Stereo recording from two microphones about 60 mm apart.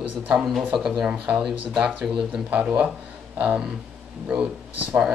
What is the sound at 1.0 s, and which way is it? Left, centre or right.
Speech, right.